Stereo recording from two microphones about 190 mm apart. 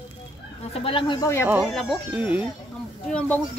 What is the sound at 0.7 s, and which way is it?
Speech, 30° left (ahead or behind).